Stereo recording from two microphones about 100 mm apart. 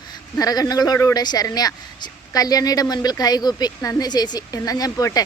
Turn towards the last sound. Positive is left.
turn(degrees=35)  # may be behind; listen again after turning